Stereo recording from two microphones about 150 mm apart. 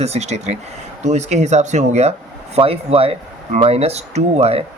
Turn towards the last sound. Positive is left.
turn(degrees=-45)  # may be behind; listen again after turning